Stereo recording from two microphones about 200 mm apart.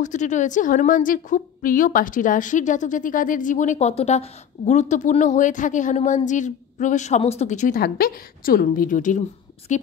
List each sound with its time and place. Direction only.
0.0 s a woman's voice: 35° left (ahead or behind)